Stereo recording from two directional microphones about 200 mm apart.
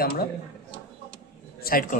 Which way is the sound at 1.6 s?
50° left (ahead or behind).